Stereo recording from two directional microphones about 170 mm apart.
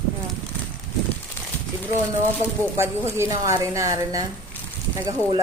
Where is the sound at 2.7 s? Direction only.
15° right (ahead or behind).